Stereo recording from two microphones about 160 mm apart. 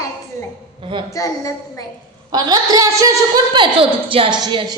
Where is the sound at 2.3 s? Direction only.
25° right (ahead or behind).